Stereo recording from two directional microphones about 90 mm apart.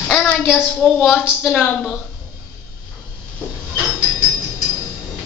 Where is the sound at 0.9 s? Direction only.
5° right (ahead or behind).